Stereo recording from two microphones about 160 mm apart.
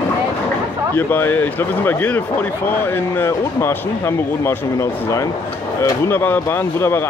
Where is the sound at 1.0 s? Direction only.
10° left (ahead or behind).